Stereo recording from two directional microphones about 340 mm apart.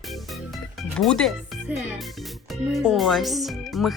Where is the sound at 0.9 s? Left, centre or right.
Centre.